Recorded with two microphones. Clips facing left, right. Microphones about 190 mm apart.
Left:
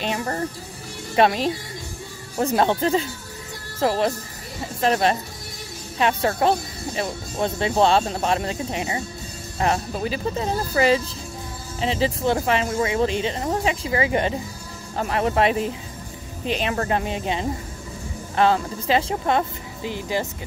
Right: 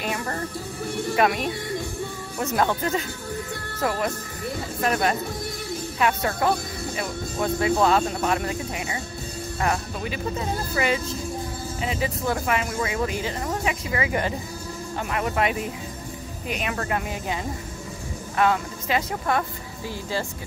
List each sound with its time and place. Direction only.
0.0 s speech: 25° left (ahead or behind)